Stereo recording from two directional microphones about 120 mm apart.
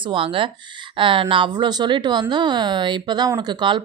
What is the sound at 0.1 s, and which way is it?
Speech, 45° right (ahead or behind).